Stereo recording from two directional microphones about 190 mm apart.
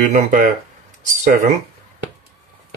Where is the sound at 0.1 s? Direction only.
45° right (ahead or behind).